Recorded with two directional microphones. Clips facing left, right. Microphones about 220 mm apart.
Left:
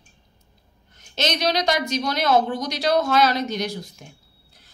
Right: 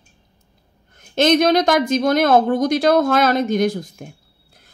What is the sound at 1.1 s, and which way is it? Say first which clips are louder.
Speech: right 9 dB; 50° right (ahead or behind).